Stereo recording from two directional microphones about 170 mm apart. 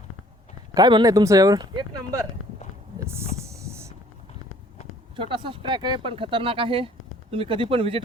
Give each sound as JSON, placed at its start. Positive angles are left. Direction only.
{"t": 0.7, "sound": "speech", "side_deg": -25}
{"t": 3.0, "sound": "a sound", "side_deg": -15}
{"t": 5.1, "sound": "speech", "side_deg": -30}